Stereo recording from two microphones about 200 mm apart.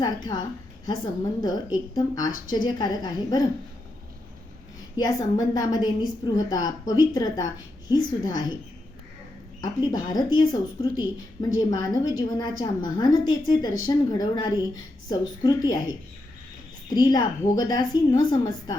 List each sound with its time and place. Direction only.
0.0 s a woman's voice: 20° left (ahead or behind)
4.9 s a woman's voice: 20° left (ahead or behind)
9.6 s a woman's voice: 20° left (ahead or behind)